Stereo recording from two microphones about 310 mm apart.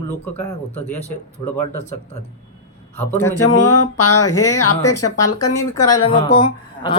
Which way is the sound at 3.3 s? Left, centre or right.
Left.